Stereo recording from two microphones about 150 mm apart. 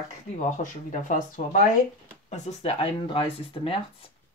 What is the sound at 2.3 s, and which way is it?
Speech, 45° left (ahead or behind).